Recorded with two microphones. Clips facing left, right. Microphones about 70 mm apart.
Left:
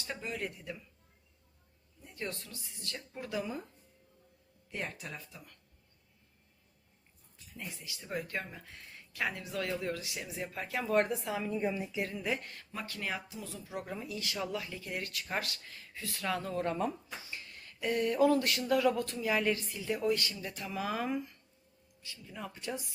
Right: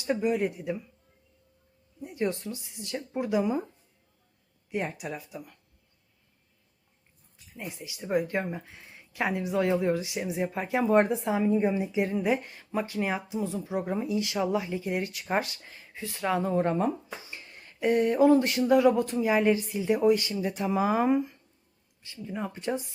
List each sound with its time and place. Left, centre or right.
0.0 s speech: centre
2.0 s speech: centre
4.7 s speech: centre
7.5 s speech: right
22.0 s speech: right